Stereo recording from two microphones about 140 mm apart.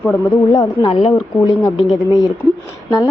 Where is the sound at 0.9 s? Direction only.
45° left (ahead or behind).